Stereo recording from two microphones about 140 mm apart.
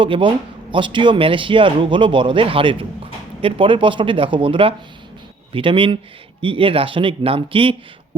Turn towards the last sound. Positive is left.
turn(degrees=-40)  # may be behind; listen again after turning